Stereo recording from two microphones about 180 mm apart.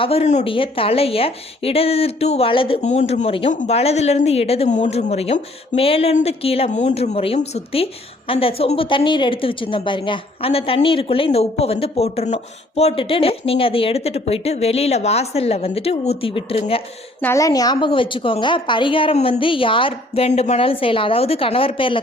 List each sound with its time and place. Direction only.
0.0 s speech: 35° left (ahead or behind)
17.2 s a woman's voice: 15° left (ahead or behind)